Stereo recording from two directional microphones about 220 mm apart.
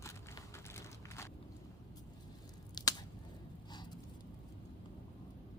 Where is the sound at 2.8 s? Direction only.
20° left (ahead or behind).